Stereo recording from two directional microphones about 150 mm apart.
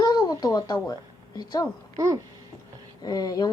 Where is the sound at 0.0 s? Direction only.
30° left (ahead or behind).